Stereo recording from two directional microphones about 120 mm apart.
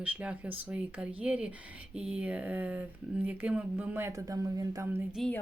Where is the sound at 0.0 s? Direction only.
10° right (ahead or behind).